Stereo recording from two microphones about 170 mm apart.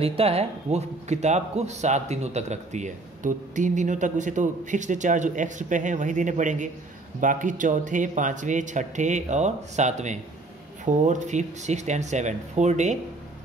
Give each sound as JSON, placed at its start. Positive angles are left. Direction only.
{"t": 0.0, "sound": "a man's voice", "side_deg": -35}